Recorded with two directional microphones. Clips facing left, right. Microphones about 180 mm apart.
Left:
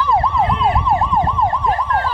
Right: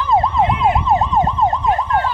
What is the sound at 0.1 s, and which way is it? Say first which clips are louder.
Emergency vehicle: right 3 dB; 20° right (ahead or behind).